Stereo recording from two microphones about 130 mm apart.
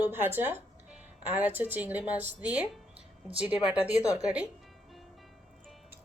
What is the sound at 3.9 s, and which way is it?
Speech, 25° left (ahead or behind).